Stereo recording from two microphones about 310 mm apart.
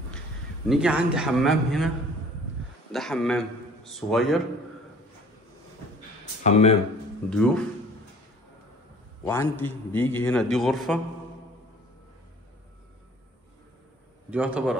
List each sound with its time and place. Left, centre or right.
0.7 s a man's voice: centre
2.9 s a man's voice: centre
6.4 s speech: left
7.2 s a man's voice: centre
9.2 s a man's voice: centre
14.3 s a man's voice: centre